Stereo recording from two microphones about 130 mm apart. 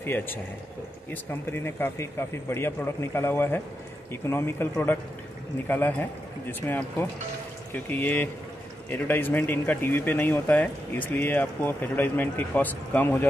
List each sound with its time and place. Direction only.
0.0 s speech: 15° left (ahead or behind)